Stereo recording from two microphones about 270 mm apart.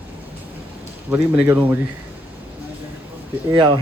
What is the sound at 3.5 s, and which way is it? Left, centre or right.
Speech, centre.